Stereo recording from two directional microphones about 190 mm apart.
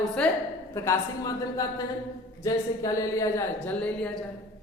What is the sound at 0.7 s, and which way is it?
A man's voice, 15° left (ahead or behind).